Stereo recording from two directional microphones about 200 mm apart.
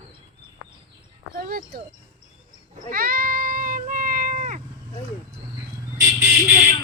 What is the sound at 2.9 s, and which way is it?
Cat, 45° right (ahead or behind).